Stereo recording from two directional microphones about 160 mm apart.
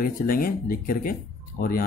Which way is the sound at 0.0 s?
65° left (ahead or behind).